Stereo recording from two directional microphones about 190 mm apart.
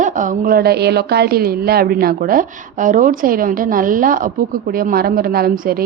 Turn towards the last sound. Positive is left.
turn(degrees=-50)  # may be behind; listen again after turning